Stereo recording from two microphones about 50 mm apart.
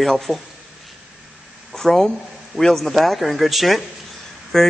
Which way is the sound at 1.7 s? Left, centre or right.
Centre.